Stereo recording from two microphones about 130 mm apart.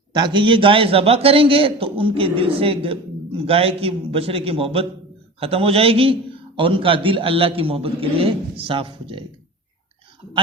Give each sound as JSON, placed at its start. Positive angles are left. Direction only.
{"t": 0.2, "sound": "a man's voice", "side_deg": -40}